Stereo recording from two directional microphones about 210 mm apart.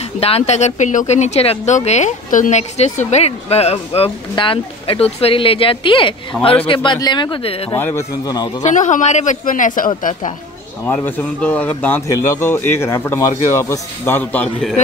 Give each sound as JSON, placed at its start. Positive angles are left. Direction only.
{"t": 0.2, "sound": "a woman's voice", "side_deg": 30}
{"t": 6.3, "sound": "a man's voice", "side_deg": 5}
{"t": 6.7, "sound": "a woman's voice", "side_deg": 20}
{"t": 7.7, "sound": "speech", "side_deg": 10}
{"t": 8.6, "sound": "speech", "side_deg": 35}
{"t": 10.9, "sound": "speech", "side_deg": 5}